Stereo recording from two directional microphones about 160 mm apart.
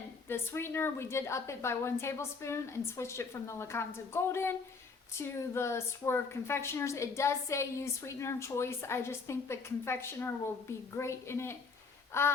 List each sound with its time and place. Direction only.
0.3 s a woman's voice: 15° left (ahead or behind)